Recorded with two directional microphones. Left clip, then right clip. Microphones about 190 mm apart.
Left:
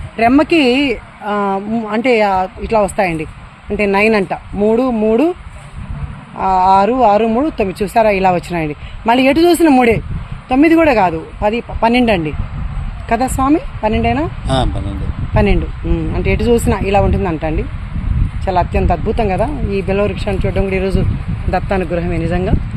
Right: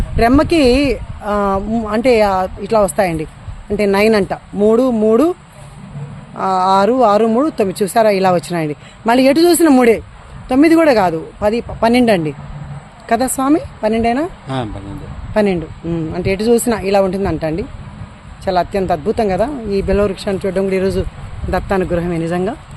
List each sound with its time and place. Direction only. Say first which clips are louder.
0.2 s speech: left 1 dB; 15° right (ahead or behind)
6.3 s speech: left 2 dB; 15° right (ahead or behind)
14.4 s speech: left 6 dB; 45° left (ahead or behind)
15.4 s speech: right 1 dB; 15° right (ahead or behind)